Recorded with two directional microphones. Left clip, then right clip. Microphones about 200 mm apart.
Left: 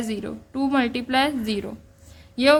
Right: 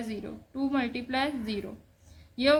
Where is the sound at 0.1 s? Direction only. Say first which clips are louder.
Left 8 dB; 35° left (ahead or behind).